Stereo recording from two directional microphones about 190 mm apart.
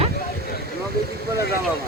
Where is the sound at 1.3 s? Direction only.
55° left (ahead or behind).